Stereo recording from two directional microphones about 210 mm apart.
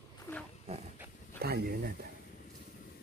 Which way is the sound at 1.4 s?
45° right (ahead or behind).